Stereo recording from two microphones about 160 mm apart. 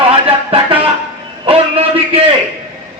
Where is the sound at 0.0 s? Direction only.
35° right (ahead or behind).